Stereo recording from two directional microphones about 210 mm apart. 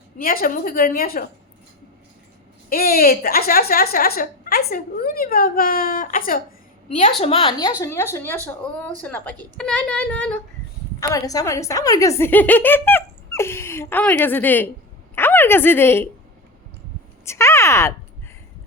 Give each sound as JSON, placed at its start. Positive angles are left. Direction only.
{"t": 0.2, "sound": "a woman's voice", "side_deg": 40}
{"t": 2.6, "sound": "a woman's voice", "side_deg": 45}
{"t": 7.2, "sound": "a woman's voice", "side_deg": 25}
{"t": 17.2, "sound": "speech", "side_deg": 15}